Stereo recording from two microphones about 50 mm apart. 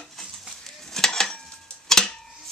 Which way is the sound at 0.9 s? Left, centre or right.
Centre.